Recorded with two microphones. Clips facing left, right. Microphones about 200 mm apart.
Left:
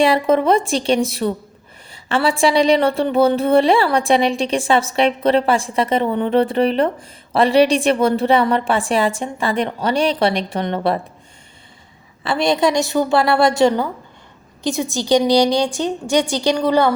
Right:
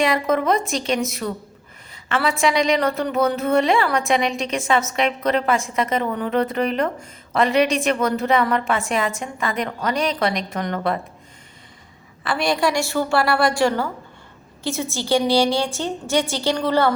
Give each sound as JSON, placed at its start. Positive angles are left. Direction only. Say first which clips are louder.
{"t": 0.0, "sound": "a woman's voice", "louder": "left 5 dB", "side_deg": 30}
{"t": 12.2, "sound": "a woman's voice", "louder": "left 4 dB", "side_deg": 25}